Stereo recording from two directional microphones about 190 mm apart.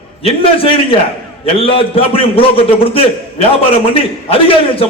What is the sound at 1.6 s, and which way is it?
A man's voice, 30° left (ahead or behind).